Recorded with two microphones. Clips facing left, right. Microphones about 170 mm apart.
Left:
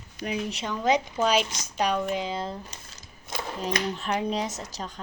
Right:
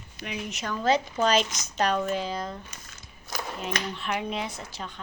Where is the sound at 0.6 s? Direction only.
15° left (ahead or behind).